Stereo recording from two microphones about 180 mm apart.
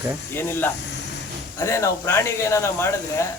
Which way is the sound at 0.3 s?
10° left (ahead or behind).